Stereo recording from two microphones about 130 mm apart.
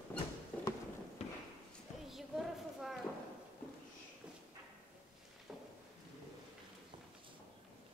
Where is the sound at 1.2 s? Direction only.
55° left (ahead or behind).